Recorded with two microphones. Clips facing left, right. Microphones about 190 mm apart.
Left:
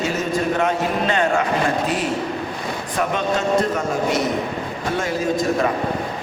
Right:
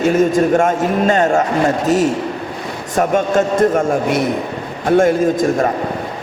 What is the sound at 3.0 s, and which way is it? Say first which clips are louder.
A man's voice: right 7 dB; 50° right (ahead or behind).